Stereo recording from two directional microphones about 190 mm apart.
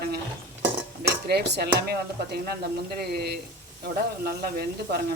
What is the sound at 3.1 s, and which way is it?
Speech, 55° right (ahead or behind).